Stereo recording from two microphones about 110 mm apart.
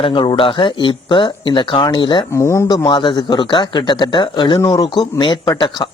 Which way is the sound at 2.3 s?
25° left (ahead or behind).